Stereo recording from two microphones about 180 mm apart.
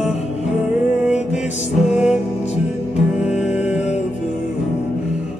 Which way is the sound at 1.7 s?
Centre (ahead or behind).